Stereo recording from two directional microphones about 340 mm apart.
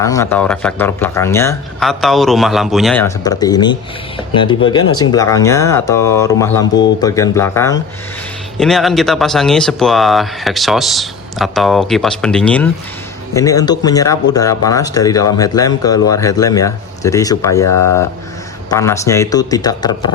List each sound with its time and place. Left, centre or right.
0.0 s speech: centre
17.7 s speech: left
18.7 s speech: centre